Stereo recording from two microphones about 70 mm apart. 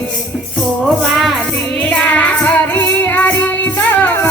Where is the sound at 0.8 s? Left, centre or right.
Centre.